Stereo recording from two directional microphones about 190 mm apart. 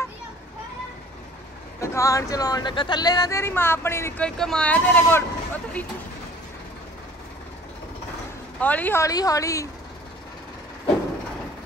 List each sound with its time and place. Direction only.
1.8 s speech: 15° left (ahead or behind)
8.5 s speech: 10° left (ahead or behind)